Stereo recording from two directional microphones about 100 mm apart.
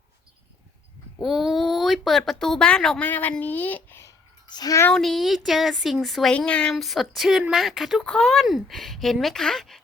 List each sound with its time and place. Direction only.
1.2 s speech: 5° right (ahead or behind)
3.0 s speech: 15° left (ahead or behind)
4.4 s speech: 45° left (ahead or behind)
4.9 s speech: centre (ahead or behind)
6.3 s speech: 10° left (ahead or behind)